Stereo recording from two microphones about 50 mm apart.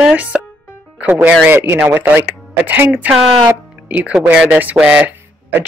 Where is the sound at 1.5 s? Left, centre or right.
Right.